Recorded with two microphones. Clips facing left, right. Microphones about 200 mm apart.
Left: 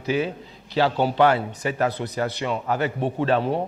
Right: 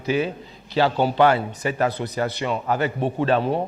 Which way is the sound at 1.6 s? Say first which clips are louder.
Right 1 dB; 10° right (ahead or behind).